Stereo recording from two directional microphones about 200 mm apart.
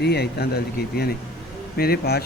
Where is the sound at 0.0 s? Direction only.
55° left (ahead or behind).